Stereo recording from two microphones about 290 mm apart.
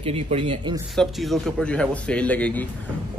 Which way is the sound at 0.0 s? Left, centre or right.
Centre.